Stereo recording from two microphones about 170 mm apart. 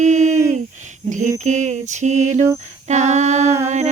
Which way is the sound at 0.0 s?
40° right (ahead or behind).